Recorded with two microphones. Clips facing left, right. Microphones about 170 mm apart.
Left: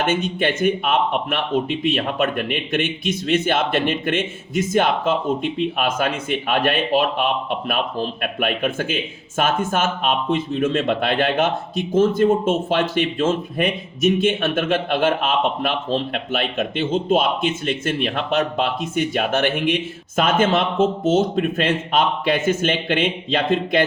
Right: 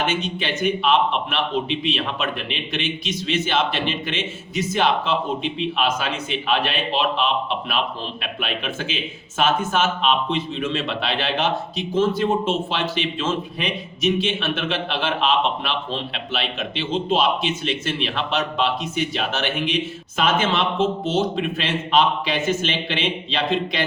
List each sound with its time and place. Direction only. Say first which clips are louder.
0.0 s speech: left 4 dB; 50° left (ahead or behind)